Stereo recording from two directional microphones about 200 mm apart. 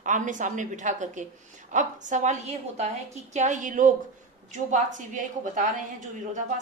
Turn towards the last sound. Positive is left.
turn(degrees=-40)  # may be behind; listen again after turning